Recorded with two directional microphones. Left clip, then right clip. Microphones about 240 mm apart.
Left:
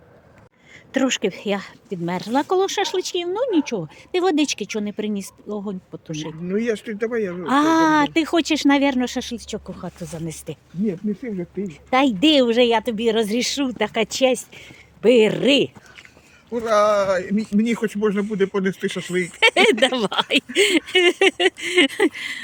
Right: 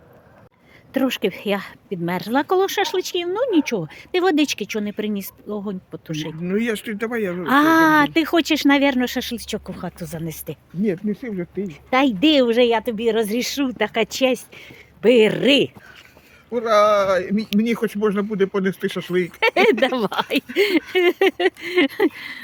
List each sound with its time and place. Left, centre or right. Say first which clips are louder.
0.9 s speech: even; centre
6.4 s speech: even; right
7.4 s speech: right 2 dB; centre
10.8 s speech: right 2 dB; right
11.7 s speech: even; centre